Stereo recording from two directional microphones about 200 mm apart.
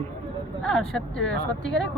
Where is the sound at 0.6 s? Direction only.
5° left (ahead or behind).